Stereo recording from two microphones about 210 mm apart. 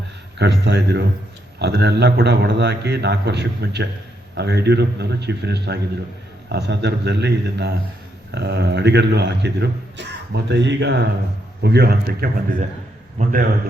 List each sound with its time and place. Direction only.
0.3 s a man's voice: 50° right (ahead or behind)